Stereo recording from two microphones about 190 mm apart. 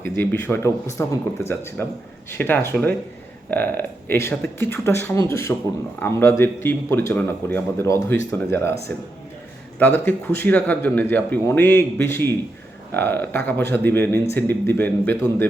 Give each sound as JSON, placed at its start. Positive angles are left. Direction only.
{"t": 0.2, "sound": "speech", "side_deg": 10}
{"t": 9.7, "sound": "speech", "side_deg": 10}